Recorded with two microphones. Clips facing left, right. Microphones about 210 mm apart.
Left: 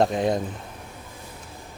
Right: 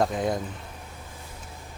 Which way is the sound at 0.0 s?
20° left (ahead or behind).